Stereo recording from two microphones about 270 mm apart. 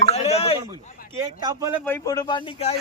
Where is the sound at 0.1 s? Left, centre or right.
Left.